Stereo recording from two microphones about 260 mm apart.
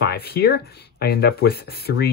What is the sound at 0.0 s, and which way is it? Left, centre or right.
Speech, left.